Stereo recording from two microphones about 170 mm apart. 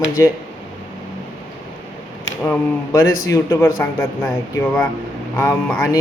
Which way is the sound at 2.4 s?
15° left (ahead or behind).